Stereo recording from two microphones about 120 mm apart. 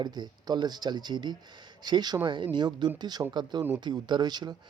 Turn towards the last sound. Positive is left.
turn(degrees=-35)  # may be behind; listen again after turning